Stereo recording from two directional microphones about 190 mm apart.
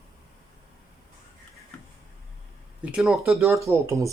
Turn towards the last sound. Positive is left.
turn(degrees=-15)  # may be behind; listen again after turning